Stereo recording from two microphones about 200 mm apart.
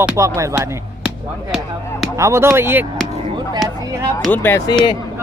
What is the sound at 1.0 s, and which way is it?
Speech, 5° right (ahead or behind).